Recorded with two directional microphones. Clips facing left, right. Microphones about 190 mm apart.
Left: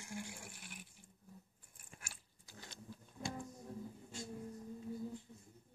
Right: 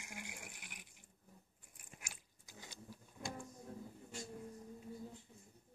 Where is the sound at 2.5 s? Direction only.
10° right (ahead or behind).